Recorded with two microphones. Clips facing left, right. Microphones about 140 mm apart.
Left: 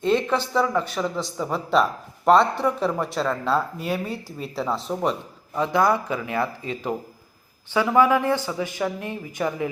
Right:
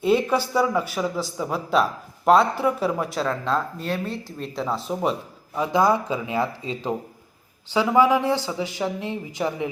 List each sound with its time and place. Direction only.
0.0 s a man's voice: 10° right (ahead or behind)
5.5 s a man's voice: 20° right (ahead or behind)